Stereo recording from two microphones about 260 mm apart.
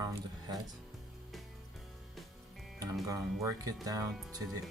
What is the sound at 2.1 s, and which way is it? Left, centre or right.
Music, centre.